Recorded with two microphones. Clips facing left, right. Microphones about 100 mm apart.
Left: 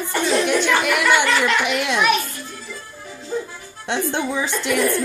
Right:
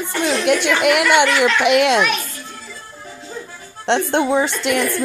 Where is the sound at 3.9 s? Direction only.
65° right (ahead or behind).